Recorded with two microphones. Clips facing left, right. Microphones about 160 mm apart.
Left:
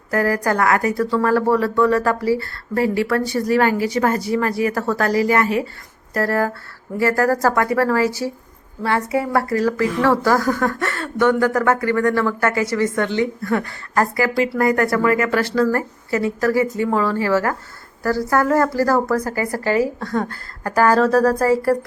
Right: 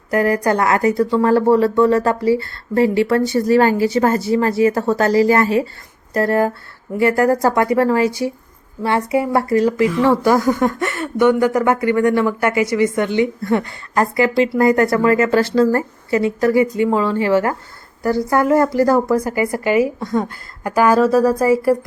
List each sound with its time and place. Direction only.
0.1 s a woman's voice: 20° right (ahead or behind)